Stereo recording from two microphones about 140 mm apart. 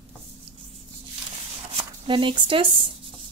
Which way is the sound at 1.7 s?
35° right (ahead or behind).